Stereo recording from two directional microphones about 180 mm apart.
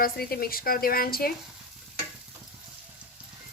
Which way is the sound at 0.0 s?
55° left (ahead or behind).